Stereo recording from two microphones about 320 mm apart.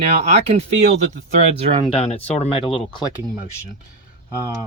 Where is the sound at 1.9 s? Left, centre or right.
Centre.